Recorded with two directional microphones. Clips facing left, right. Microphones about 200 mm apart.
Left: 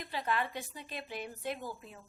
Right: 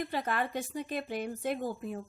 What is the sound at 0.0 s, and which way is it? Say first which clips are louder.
A woman's voice: right 3 dB; 50° right (ahead or behind).